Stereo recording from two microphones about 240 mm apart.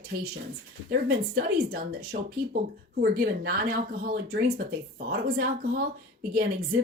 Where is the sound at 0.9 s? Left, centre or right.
Right.